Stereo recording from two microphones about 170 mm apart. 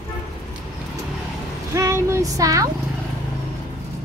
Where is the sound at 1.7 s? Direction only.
15° right (ahead or behind).